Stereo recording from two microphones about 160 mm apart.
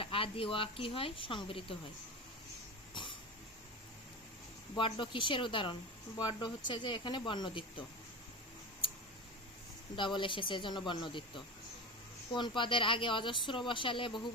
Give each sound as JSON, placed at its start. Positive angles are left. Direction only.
{"t": 0.0, "sound": "speech", "side_deg": 35}
{"t": 2.9, "sound": "cough", "side_deg": 30}
{"t": 4.7, "sound": "speech", "side_deg": 30}
{"t": 9.9, "sound": "speech", "side_deg": 30}